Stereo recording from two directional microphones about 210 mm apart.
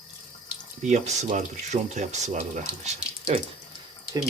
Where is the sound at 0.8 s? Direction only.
35° right (ahead or behind).